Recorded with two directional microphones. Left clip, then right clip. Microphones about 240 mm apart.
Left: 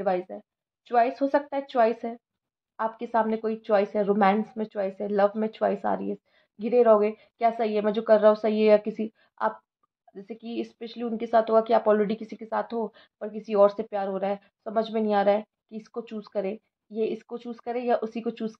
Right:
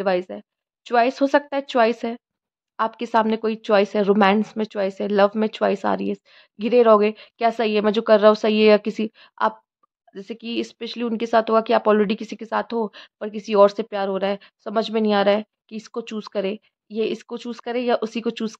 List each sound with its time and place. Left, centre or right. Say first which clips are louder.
0.0 s speech: right 5 dB; right